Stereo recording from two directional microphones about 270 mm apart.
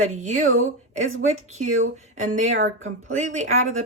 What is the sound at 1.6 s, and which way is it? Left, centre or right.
Speech, right.